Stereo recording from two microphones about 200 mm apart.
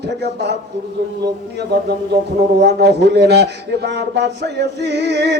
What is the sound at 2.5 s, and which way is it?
Speech, 55° right (ahead or behind).